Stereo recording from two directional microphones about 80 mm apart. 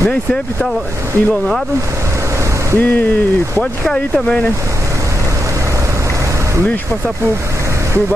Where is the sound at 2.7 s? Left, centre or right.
Left.